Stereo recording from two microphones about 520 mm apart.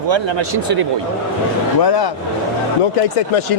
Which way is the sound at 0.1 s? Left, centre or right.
Right.